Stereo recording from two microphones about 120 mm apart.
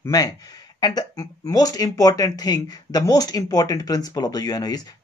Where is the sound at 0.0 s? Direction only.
30° left (ahead or behind).